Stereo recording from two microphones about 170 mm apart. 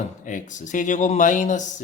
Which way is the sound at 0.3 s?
50° left (ahead or behind).